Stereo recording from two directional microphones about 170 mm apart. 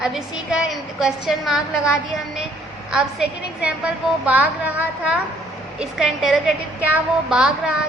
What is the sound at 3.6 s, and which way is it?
A woman's voice, 10° right (ahead or behind).